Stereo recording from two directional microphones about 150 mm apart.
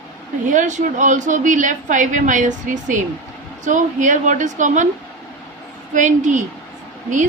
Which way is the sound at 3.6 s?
55° right (ahead or behind).